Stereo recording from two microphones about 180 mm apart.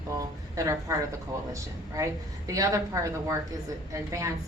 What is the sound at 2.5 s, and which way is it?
A woman's voice, 20° right (ahead or behind).